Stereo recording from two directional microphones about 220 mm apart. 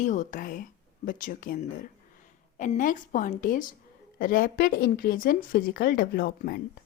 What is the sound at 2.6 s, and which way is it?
Speech, 35° left (ahead or behind).